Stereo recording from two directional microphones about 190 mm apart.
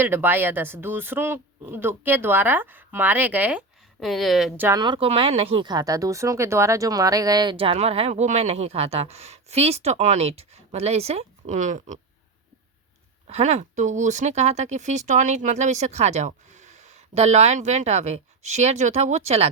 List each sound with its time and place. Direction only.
0.0 s speech: 10° right (ahead or behind)
4.8 s speech: 25° right (ahead or behind)
13.2 s speech: 35° right (ahead or behind)